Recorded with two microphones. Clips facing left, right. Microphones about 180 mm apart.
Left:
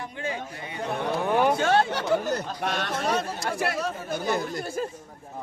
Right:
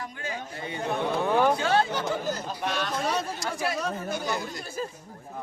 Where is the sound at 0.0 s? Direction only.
30° left (ahead or behind).